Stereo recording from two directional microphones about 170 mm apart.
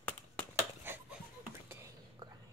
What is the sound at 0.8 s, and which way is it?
Finger snapping, 10° right (ahead or behind).